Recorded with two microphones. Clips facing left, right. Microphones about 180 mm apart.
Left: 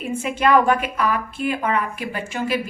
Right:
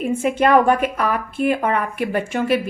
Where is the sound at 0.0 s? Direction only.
50° right (ahead or behind).